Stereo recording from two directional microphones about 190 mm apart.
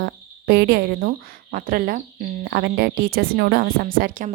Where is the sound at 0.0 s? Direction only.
60° right (ahead or behind).